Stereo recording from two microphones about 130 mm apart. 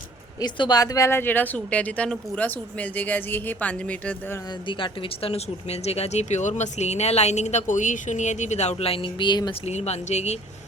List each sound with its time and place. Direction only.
0.3 s speech: 30° left (ahead or behind); by 4.4 s 10° left (ahead or behind)
4.8 s speech: 50° left (ahead or behind)
9.6 s speech: 55° left (ahead or behind)